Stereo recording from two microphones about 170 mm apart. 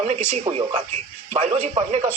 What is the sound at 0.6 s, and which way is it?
Speech, 30° right (ahead or behind).